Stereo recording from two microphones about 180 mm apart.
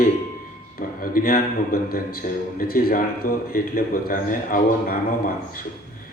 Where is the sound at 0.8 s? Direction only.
55° left (ahead or behind).